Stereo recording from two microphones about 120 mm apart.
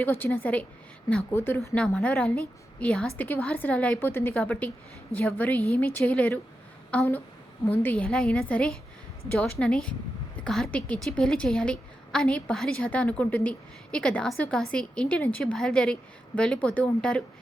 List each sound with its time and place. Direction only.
0.0 s a woman's voice: 15° left (ahead or behind)